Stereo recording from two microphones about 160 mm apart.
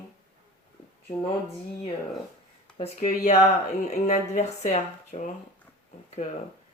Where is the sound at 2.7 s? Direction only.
45° left (ahead or behind).